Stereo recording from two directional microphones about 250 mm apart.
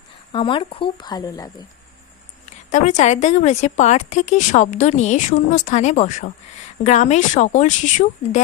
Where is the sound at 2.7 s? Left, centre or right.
Left.